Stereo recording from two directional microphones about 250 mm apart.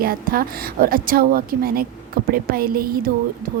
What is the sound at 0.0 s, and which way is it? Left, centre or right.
A woman's voice, right.